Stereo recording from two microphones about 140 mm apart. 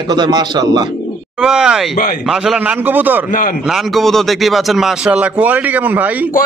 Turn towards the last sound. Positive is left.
turn(degrees=-10)  # may be behind; listen again after turning